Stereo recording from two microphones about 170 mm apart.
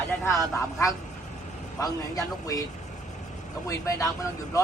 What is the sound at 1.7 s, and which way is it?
Speech, 20° left (ahead or behind).